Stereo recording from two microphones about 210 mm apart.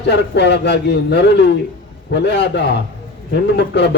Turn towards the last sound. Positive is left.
turn(degrees=55)  # may be behind; listen again after turning